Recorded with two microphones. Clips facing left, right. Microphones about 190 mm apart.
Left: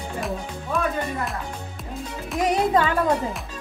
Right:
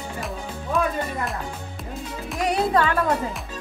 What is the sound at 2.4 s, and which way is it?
Music, 20° left (ahead or behind).